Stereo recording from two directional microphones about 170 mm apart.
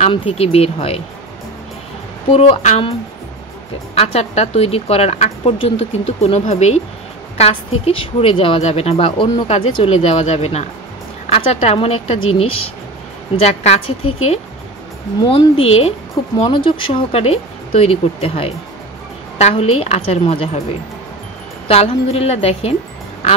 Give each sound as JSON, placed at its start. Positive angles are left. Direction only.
{"t": 0.0, "sound": "a woman's voice", "side_deg": 35}
{"t": 2.3, "sound": "a woman's voice", "side_deg": 40}
{"t": 21.6, "sound": "a woman's voice", "side_deg": 35}